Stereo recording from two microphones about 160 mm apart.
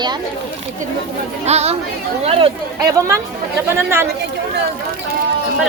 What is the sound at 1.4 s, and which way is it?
A woman's voice, 40° right (ahead or behind).